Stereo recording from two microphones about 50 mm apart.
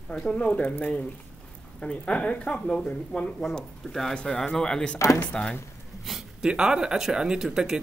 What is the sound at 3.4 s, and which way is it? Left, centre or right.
Speech, centre.